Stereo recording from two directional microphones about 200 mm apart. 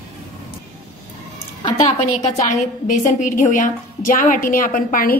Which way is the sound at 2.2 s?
35° left (ahead or behind).